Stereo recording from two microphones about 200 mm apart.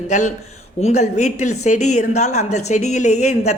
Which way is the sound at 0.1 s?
35° left (ahead or behind).